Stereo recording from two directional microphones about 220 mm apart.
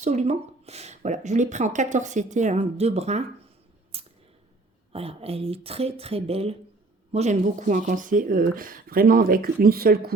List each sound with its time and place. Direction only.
0.0 s speech: 30° right (ahead or behind)
3.9 s a sound: 25° right (ahead or behind)
4.9 s speech: 25° right (ahead or behind); by 10.1 s 45° right (ahead or behind)